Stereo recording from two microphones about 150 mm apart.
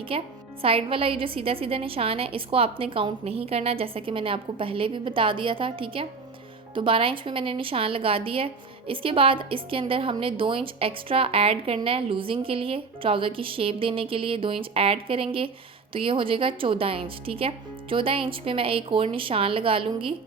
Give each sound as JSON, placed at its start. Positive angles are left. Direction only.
{"t": 0.1, "sound": "a woman's voice", "side_deg": -40}